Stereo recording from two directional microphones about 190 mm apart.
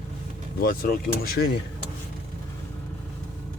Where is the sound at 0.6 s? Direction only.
50° left (ahead or behind).